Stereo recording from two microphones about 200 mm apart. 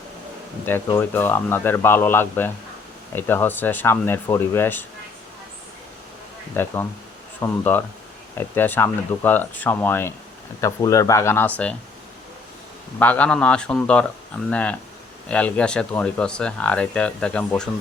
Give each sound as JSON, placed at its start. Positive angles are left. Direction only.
{"t": 0.6, "sound": "a man's voice", "side_deg": 10}
{"t": 6.5, "sound": "a man's voice", "side_deg": 10}
{"t": 13.0, "sound": "a man's voice", "side_deg": 5}